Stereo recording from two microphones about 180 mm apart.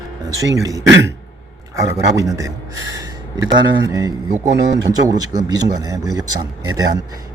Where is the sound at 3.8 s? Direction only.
20° right (ahead or behind).